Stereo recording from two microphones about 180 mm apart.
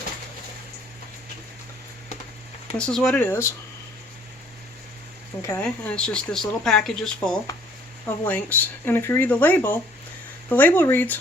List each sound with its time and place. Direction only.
2.7 s speech: 5° left (ahead or behind)
5.4 s speech: 15° left (ahead or behind)